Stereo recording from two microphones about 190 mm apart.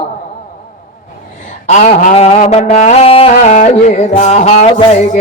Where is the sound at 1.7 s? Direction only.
40° left (ahead or behind).